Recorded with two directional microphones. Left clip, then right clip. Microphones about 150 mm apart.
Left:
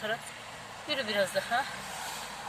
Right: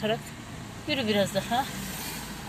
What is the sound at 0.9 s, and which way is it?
Speech, 5° left (ahead or behind).